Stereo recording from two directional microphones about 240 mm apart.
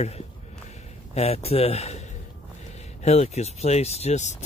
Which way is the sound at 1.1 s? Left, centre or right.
Left.